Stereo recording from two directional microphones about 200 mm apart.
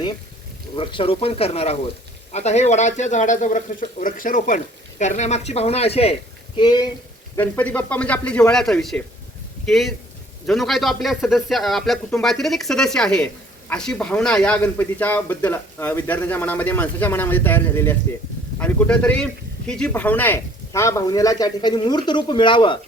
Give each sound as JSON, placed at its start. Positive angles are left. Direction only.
{"t": 0.8, "sound": "a man's voice", "side_deg": 25}
{"t": 7.3, "sound": "a man's voice", "side_deg": 10}